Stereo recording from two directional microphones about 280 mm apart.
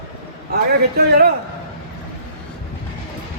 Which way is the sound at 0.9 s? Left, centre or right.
Right.